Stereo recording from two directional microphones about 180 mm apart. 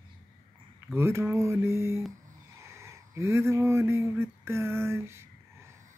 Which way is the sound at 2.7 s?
15° right (ahead or behind).